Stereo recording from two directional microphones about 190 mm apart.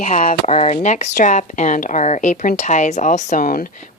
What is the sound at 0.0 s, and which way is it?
A woman's voice, 40° left (ahead or behind).